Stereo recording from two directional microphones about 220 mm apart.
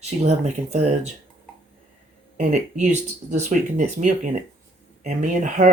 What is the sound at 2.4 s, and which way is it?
Speech, 30° right (ahead or behind).